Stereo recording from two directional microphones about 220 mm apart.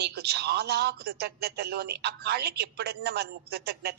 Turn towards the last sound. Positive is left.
turn(degrees=-45)  # may be behind; listen again after turning